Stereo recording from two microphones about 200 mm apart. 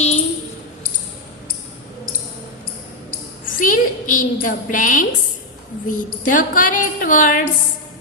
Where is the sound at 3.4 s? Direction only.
40° left (ahead or behind).